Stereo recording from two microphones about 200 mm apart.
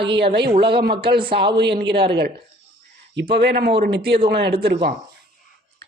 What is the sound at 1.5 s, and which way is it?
Speech, 60° right (ahead or behind).